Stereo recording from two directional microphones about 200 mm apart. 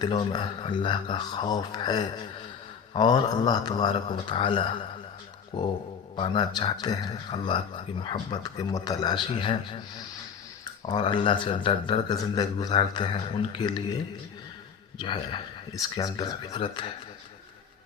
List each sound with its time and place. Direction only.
0.0 s speech: 20° left (ahead or behind)